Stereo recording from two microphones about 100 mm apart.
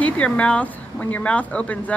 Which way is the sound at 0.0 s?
15° left (ahead or behind).